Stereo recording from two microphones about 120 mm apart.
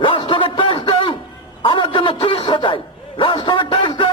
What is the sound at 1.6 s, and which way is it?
A man's voice, 45° left (ahead or behind).